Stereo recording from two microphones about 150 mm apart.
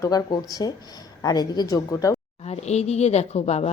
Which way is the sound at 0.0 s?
25° left (ahead or behind).